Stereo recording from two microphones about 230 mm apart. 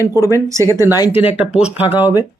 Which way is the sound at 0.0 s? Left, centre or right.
Centre.